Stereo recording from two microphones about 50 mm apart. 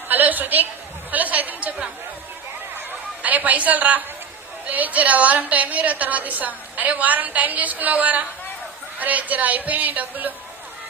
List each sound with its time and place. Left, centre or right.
0.1 s a sound: right
1.1 s chatter: right
3.2 s a woman's voice: right